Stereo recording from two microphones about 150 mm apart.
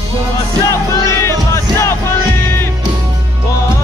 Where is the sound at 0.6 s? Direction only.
20° left (ahead or behind).